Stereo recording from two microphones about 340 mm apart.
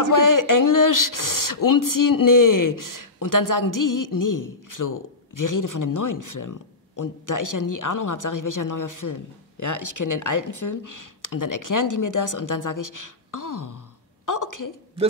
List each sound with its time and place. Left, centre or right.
0.1 s speech: left